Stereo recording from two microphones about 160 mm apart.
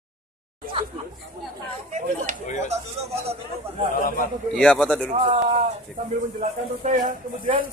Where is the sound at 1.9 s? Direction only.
45° right (ahead or behind).